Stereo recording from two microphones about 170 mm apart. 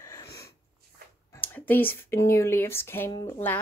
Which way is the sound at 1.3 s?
10° left (ahead or behind).